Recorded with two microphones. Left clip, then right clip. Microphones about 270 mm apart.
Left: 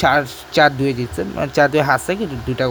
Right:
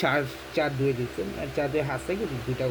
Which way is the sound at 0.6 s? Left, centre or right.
Left.